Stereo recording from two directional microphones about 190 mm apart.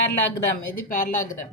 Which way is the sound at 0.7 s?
45° left (ahead or behind).